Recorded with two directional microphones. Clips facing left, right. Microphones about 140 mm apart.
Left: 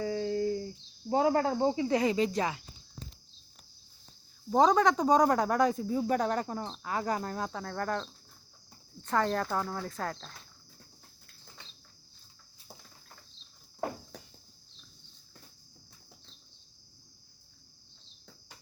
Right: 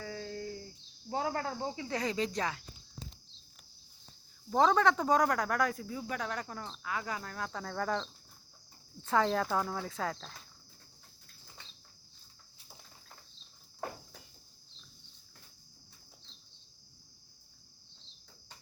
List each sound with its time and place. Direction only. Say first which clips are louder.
0.0 s a sound: left 10 dB; 20° left (ahead or behind)
1.1 s cricket: left 8 dB; 20° left (ahead or behind)
1.5 s speech: left 9 dB; 25° left (ahead or behind)
4.4 s speech: left 3 dB; 15° left (ahead or behind); by 7.4 s 35° left (ahead or behind)
7.5 s speech: left 1 dB; centre (ahead or behind)